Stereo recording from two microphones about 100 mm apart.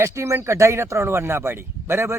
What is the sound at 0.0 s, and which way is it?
Speech, 30° right (ahead or behind).